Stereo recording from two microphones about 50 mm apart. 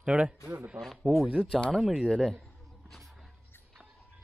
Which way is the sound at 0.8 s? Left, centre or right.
Right.